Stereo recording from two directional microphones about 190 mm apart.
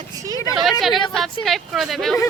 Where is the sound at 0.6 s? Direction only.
Centre (ahead or behind).